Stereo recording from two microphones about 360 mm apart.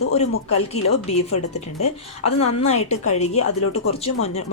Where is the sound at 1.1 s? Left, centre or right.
Centre.